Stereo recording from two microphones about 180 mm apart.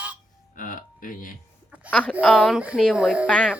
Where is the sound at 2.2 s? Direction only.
5° left (ahead or behind).